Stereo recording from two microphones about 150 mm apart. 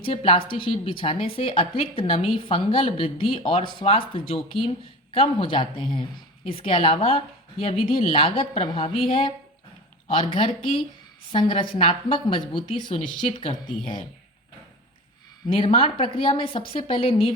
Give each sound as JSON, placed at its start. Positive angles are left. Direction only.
{"t": 0.0, "sound": "a woman's voice", "side_deg": 40}
{"t": 15.4, "sound": "a woman's voice", "side_deg": 35}